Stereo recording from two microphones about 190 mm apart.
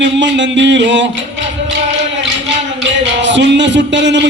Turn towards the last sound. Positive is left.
turn(degrees=-70)  # may be behind; listen again after turning